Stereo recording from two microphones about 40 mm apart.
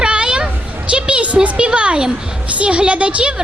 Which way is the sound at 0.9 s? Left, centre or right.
Right.